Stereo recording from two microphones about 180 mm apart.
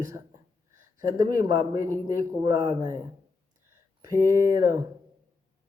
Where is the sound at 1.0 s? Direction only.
20° right (ahead or behind).